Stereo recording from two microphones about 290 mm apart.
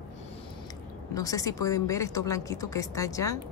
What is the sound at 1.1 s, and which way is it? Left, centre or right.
A woman's voice, centre.